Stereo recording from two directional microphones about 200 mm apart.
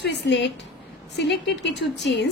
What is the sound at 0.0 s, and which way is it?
A woman's voice, 60° left (ahead or behind).